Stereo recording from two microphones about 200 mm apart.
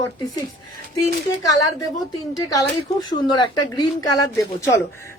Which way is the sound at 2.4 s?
20° left (ahead or behind).